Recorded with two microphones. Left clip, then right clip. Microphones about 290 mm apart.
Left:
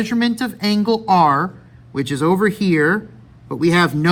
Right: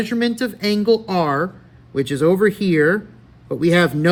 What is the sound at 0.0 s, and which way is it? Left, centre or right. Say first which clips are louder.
Speech: even; centre.